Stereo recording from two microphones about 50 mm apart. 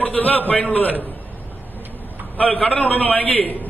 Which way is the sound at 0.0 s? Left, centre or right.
Left.